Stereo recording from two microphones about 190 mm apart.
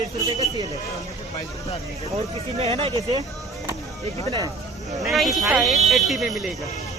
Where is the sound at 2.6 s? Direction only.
30° right (ahead or behind).